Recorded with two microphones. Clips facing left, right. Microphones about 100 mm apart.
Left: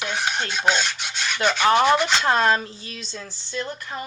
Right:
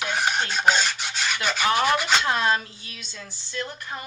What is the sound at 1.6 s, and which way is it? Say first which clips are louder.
Speech: left 5 dB; 35° left (ahead or behind).